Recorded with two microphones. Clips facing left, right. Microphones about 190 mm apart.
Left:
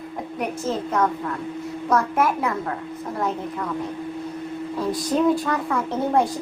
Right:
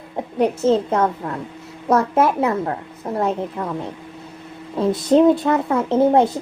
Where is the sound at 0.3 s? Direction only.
30° right (ahead or behind).